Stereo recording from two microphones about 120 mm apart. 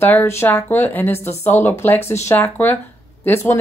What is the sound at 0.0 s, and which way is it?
Speech, 15° left (ahead or behind).